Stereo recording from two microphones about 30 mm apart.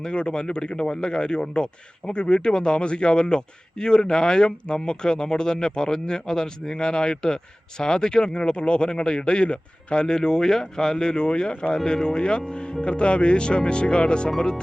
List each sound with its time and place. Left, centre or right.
0.0 s speech: left